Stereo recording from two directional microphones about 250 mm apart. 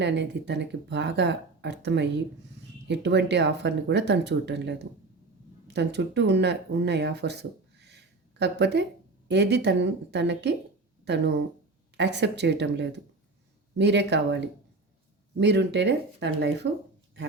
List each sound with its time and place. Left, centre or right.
0.0 s speech: right
11.9 s speech: right